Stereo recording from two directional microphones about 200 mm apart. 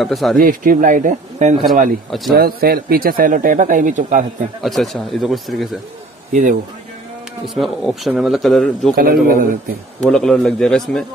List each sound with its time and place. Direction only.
0.0 s speech: centre (ahead or behind)
0.4 s speech: 45° right (ahead or behind)
2.0 s speech: centre (ahead or behind)
2.3 s speech: 50° right (ahead or behind)
4.6 s speech: centre (ahead or behind)
6.3 s speech: 40° right (ahead or behind)
7.4 s speech: centre (ahead or behind)
8.9 s speech: 45° right (ahead or behind)
10.0 s speech: 5° left (ahead or behind)